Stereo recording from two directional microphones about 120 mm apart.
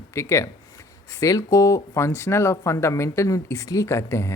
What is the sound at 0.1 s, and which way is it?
Speech, 25° left (ahead or behind).